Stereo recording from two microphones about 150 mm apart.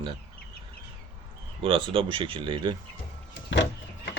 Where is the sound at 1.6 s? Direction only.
35° right (ahead or behind).